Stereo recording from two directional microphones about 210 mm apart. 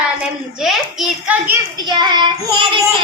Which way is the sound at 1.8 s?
20° right (ahead or behind).